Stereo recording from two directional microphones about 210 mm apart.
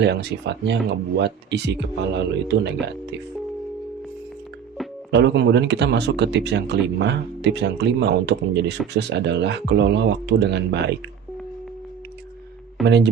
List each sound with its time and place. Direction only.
0.0 s speech: 55° right (ahead or behind)
5.1 s speech: 55° right (ahead or behind)
12.8 s speech: 55° right (ahead or behind)